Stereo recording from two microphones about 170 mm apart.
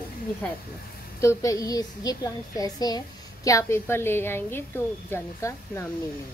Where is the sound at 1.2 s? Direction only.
20° left (ahead or behind).